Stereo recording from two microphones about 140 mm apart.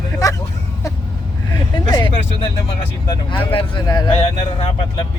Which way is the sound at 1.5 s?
30° left (ahead or behind).